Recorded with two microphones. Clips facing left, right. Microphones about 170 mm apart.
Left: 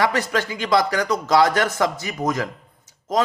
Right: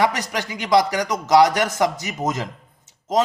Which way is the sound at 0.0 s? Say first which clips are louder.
Left 1 dB; 15° right (ahead or behind).